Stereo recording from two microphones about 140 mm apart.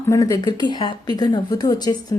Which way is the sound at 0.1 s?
25° left (ahead or behind).